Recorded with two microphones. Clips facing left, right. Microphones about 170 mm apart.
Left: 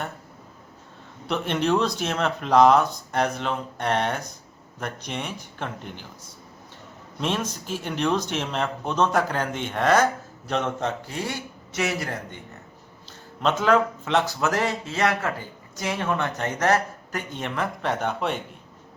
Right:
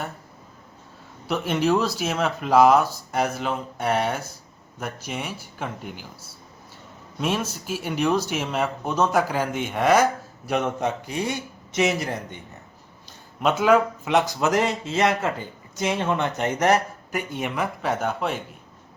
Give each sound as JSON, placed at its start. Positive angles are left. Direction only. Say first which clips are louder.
{"t": 1.3, "sound": "speech", "louder": "right 1 dB", "side_deg": -5}
{"t": 13.4, "sound": "speech", "louder": "right 2 dB", "side_deg": -10}